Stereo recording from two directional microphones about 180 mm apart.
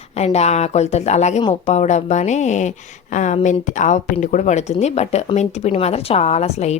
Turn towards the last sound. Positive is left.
turn(degrees=35)  # may be behind; listen again after turning